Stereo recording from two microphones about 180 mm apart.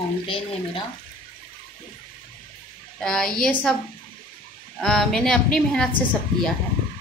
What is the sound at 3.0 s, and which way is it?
Speech, 5° left (ahead or behind).